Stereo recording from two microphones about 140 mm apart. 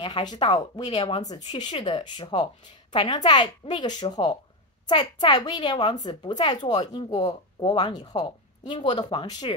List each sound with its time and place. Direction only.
0.0 s speech: 35° left (ahead or behind)